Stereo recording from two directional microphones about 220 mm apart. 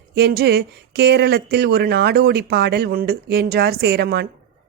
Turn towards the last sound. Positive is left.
turn(degrees=-45)  # may be behind; listen again after turning